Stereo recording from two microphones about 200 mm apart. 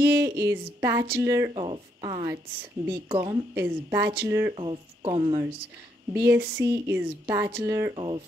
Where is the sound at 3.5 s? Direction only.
10° right (ahead or behind).